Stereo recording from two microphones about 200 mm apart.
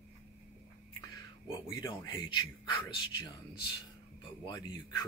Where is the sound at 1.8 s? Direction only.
25° left (ahead or behind).